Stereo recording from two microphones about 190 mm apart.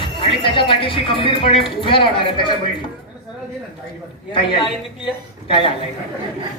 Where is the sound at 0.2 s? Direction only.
30° left (ahead or behind).